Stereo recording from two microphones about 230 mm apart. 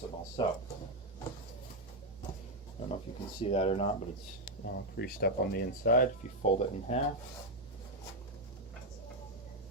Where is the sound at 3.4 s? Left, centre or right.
Left.